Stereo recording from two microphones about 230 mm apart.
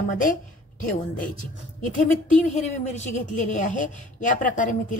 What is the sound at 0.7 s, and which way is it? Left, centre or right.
A woman's voice, left.